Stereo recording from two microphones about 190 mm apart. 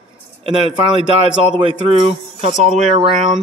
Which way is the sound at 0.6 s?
30° right (ahead or behind).